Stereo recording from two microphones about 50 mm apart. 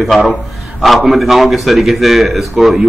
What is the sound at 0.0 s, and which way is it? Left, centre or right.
A man's voice, centre.